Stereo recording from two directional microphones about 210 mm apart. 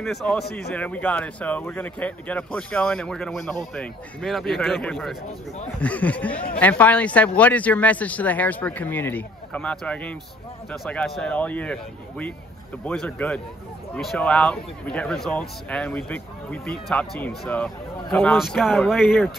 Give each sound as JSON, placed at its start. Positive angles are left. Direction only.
{"t": 0.0, "sound": "a man's voice", "side_deg": 0}